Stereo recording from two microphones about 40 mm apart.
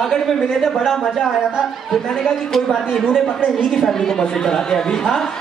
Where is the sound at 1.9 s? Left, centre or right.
Centre.